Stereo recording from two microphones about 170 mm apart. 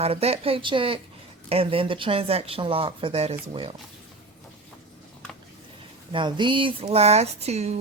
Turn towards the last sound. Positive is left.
turn(degrees=-40)  # may be behind; listen again after turning